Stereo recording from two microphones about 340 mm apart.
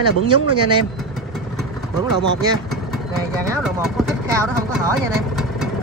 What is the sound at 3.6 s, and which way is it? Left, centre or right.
Speech, centre.